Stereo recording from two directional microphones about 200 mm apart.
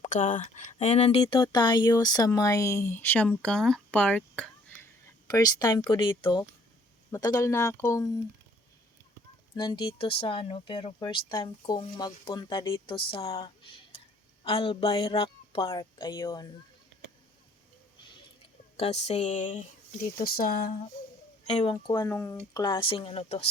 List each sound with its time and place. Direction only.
0.0 s speech: 40° left (ahead or behind); by 4.9 s 5° left (ahead or behind)
5.3 s speech: 20° left (ahead or behind)
9.6 s speech: 25° left (ahead or behind)
18.8 s speech: 35° left (ahead or behind)
20.1 s speech: 45° left (ahead or behind)
21.4 s speech: 30° left (ahead or behind)
21.9 s speech: 15° left (ahead or behind); by 23.5 s 30° left (ahead or behind)